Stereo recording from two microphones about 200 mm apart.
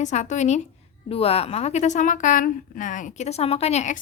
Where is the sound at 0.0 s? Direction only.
35° left (ahead or behind).